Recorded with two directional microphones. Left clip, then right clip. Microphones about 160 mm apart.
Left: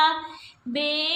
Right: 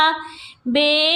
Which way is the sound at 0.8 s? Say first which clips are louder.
Right 9 dB; 45° right (ahead or behind).